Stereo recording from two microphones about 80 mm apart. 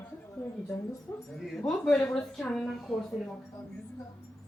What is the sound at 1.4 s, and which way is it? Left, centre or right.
A woman's voice, centre.